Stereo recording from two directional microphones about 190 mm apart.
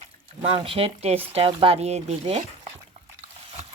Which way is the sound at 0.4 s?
30° right (ahead or behind).